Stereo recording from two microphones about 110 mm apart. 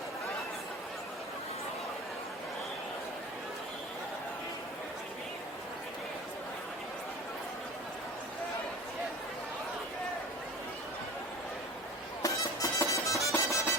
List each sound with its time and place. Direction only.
12.2 s music: 30° left (ahead or behind)